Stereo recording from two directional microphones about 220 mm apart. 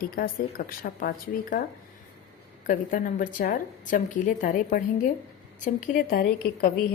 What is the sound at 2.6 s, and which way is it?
A woman's voice, 40° left (ahead or behind).